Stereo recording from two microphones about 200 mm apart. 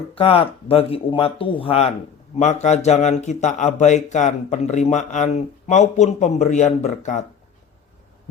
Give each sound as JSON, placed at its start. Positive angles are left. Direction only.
{"t": 0.1, "sound": "speech", "side_deg": 30}